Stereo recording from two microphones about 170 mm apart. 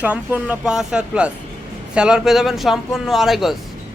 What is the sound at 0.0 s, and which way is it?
A man's voice, 10° right (ahead or behind).